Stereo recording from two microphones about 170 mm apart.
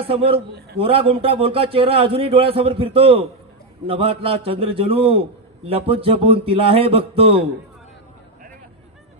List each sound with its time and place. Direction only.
0.0 s a man's voice: 35° right (ahead or behind)